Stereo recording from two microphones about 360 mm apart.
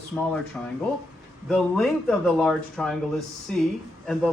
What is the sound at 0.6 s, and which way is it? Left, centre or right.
Speech, centre.